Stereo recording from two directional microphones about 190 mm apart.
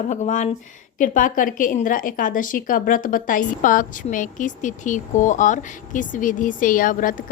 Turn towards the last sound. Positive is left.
turn(degrees=45)  # may be behind; listen again after turning